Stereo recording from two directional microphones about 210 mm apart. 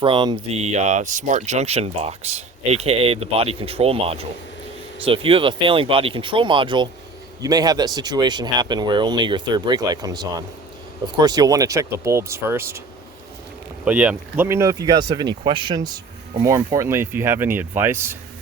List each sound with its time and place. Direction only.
0.0 s speech: 25° right (ahead or behind)
13.8 s speech: 5° right (ahead or behind)